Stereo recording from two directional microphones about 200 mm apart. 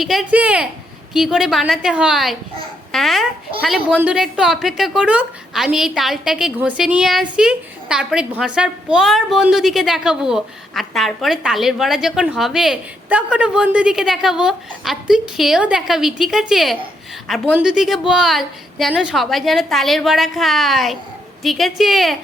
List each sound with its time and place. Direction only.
0.0 s a woman's voice: centre (ahead or behind)